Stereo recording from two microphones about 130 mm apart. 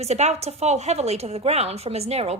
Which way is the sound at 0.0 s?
60° right (ahead or behind).